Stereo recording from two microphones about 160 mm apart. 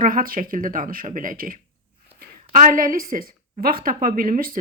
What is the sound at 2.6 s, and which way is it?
Speech, 60° right (ahead or behind).